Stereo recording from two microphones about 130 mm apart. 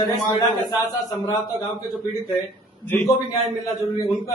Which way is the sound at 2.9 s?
15° left (ahead or behind).